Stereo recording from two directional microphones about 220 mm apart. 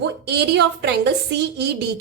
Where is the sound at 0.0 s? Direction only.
50° right (ahead or behind).